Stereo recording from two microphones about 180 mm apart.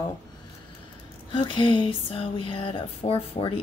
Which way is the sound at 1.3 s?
25° left (ahead or behind).